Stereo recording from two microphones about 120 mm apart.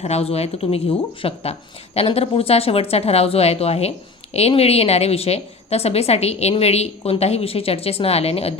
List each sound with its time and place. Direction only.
0.0 s a woman's voice: 60° left (ahead or behind)